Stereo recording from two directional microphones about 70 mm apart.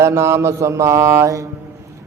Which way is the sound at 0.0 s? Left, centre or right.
Right.